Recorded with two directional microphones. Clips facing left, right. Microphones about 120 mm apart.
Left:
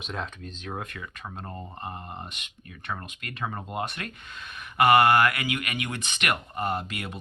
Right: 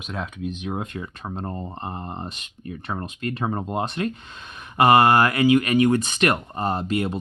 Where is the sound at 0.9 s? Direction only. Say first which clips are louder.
Right 7 dB; 30° right (ahead or behind).